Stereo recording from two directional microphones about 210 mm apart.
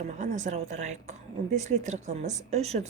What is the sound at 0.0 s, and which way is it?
A woman's voice, 35° right (ahead or behind).